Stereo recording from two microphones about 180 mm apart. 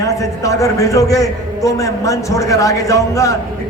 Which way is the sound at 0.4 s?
15° left (ahead or behind).